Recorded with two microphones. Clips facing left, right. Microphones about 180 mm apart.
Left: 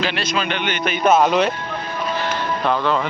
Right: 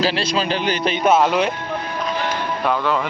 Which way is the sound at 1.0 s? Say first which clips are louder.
Left 1 dB; 10° right (ahead or behind).